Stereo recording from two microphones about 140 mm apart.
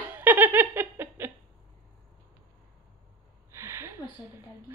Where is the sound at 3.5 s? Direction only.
20° right (ahead or behind).